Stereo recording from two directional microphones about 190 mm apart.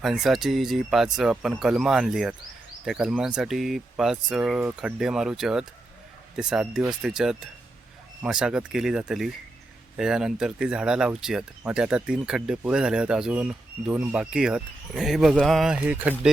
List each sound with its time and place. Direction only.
0.0 s speech: centre (ahead or behind)